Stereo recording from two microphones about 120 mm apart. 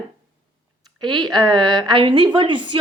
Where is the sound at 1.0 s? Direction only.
40° right (ahead or behind).